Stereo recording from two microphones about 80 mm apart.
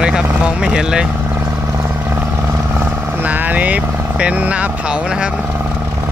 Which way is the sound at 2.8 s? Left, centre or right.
Right.